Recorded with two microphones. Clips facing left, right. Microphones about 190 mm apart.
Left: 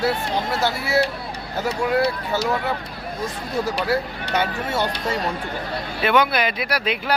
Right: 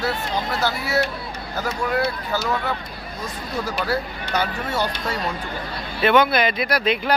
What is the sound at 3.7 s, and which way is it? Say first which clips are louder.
Speech: left 2 dB; 30° left (ahead or behind).